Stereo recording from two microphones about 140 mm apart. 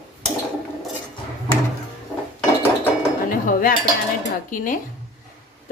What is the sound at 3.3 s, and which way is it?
Cutlery, 90° left.